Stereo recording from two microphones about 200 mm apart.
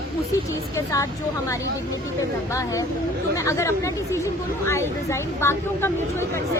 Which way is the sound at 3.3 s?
15° left (ahead or behind).